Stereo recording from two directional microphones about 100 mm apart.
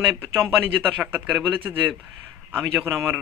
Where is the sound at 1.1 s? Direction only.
20° right (ahead or behind).